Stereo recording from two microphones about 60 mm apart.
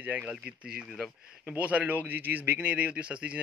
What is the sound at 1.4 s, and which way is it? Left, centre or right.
A man's voice, right.